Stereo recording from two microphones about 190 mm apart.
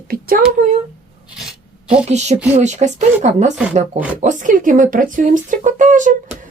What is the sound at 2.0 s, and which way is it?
Speech, 35° right (ahead or behind).